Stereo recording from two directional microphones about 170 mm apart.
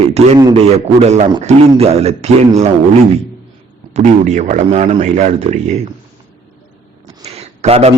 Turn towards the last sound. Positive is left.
turn(degrees=-35)  # may be behind; listen again after turning